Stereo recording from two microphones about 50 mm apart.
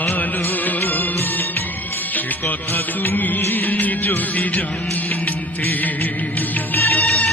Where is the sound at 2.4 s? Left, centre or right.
Left.